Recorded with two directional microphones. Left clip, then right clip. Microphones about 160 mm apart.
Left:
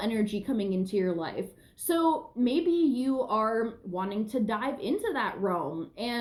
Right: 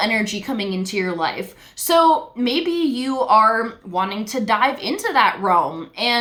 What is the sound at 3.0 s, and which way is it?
A woman's voice, 15° right (ahead or behind).